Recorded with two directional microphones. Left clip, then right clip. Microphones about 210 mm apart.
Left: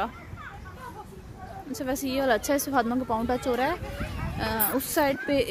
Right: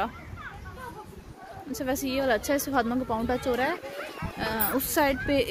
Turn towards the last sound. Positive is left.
turn(degrees=0)  # may be behind; listen again after turning